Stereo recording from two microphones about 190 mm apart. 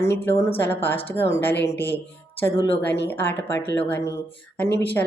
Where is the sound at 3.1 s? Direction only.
10° left (ahead or behind).